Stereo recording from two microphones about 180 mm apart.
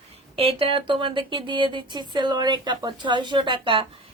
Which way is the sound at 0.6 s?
30° right (ahead or behind).